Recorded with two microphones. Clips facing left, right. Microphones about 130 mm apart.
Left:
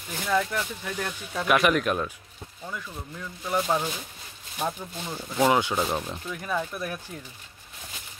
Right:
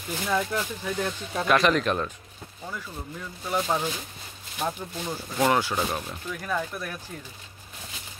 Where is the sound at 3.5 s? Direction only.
Centre (ahead or behind).